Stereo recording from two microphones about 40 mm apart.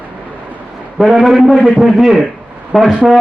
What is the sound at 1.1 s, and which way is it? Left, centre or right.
Speech, centre.